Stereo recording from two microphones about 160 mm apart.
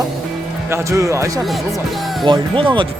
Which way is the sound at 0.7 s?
20° right (ahead or behind).